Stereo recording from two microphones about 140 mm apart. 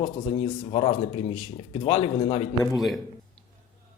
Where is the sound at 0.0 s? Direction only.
45° left (ahead or behind).